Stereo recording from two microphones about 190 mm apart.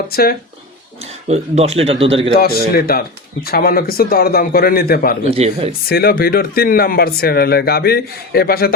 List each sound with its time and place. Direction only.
0.1 s speech: 50° left (ahead or behind)
1.3 s speech: 35° right (ahead or behind)
2.7 s speech: 50° left (ahead or behind)
5.3 s speech: 30° right (ahead or behind)
5.9 s speech: 55° left (ahead or behind)